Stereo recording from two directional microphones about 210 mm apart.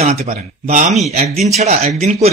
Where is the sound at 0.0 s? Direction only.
30° right (ahead or behind).